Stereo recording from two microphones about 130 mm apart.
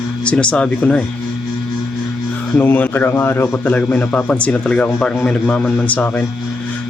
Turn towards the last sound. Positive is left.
turn(degrees=10)  # may be behind; listen again after turning